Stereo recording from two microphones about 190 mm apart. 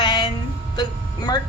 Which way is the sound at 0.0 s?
25° left (ahead or behind).